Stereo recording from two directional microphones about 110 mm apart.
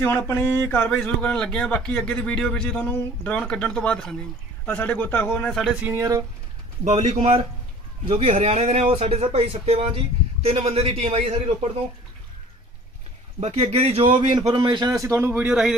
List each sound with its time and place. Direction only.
0.0 s a sound: 20° left (ahead or behind)
0.8 s a man's voice: 10° left (ahead or behind)
5.5 s speech: centre (ahead or behind)
5.9 s a man's voice: 30° right (ahead or behind)
6.9 s a man's voice: 80° right; by 11.3 s 65° right (ahead or behind)
13.4 s a man's voice: 70° right (ahead or behind); by 15.7 s 10° right (ahead or behind)